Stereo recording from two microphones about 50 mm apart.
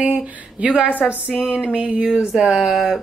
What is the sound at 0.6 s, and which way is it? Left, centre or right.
A woman's voice, right.